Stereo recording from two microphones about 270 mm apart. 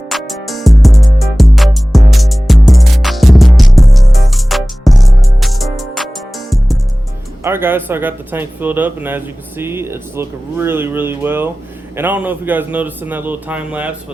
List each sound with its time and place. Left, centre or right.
0.1 s music: centre
7.4 s speech: centre